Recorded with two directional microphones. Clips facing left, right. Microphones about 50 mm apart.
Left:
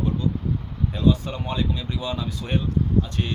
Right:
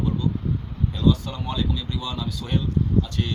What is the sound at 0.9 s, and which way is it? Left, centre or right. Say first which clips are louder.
Speech: left 1 dB; left.